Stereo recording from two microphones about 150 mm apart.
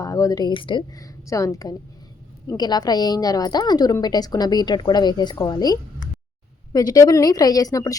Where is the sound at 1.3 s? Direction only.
20° left (ahead or behind).